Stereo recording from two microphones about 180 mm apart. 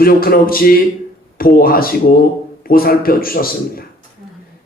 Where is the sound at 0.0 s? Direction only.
55° left (ahead or behind).